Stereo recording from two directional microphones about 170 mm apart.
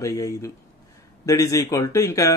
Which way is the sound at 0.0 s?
15° left (ahead or behind).